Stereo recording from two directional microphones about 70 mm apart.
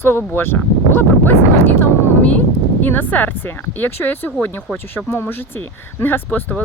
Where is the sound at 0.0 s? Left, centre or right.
Left.